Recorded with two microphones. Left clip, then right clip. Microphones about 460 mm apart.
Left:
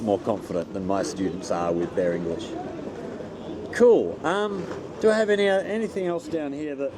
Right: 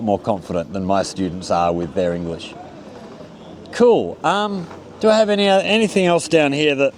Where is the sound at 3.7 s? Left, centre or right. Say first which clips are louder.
Right 3 dB; right.